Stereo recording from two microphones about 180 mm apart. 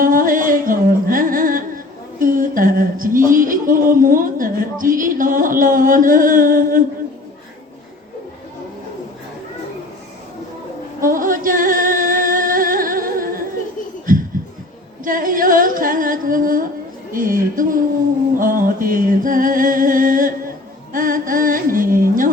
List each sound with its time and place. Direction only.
0.0 s music: 50° right (ahead or behind)
2.1 s a sound: 50° right (ahead or behind)
11.0 s music: 50° right (ahead or behind)
14.1 s a sound: 50° right (ahead or behind)
15.0 s singing: 50° right (ahead or behind)
17.2 s music: 50° right (ahead or behind)